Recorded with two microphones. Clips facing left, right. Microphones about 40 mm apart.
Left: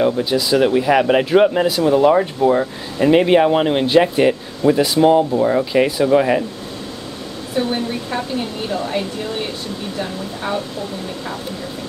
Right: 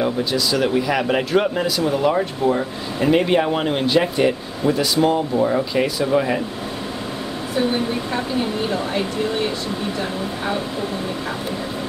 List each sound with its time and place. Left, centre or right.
0.0 s speech: centre